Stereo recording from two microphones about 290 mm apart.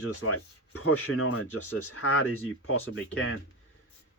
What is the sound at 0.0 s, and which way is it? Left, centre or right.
Speech, left.